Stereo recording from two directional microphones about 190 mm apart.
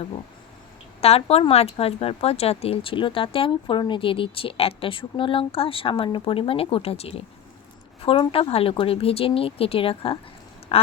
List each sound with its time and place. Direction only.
1.0 s speech: 30° left (ahead or behind)